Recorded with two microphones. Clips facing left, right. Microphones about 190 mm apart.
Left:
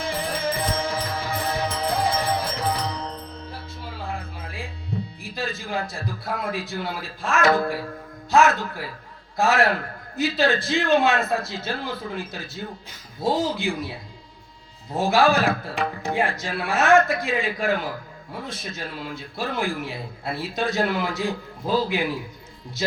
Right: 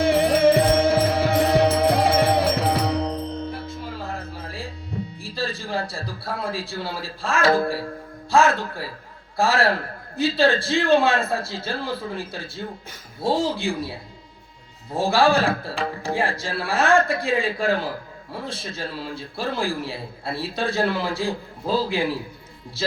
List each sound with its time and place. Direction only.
0.0 s music: 70° right (ahead or behind)
4.0 s a sound: 40° right (ahead or behind)
5.2 s a man's voice: 30° right (ahead or behind)